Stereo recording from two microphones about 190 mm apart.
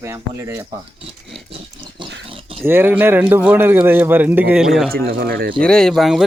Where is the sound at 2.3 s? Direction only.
30° right (ahead or behind).